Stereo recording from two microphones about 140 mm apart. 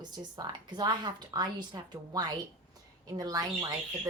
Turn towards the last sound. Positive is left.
turn(degrees=-25)  # may be behind; listen again after turning